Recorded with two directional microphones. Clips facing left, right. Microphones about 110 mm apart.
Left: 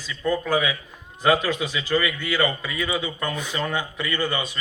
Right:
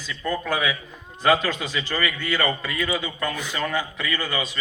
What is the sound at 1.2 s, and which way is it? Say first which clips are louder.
A man's voice: even; 5° left (ahead or behind).